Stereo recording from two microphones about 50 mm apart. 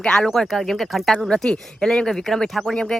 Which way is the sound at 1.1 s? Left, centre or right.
Centre.